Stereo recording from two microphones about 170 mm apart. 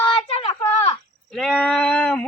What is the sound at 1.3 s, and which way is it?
Sheep, centre (ahead or behind).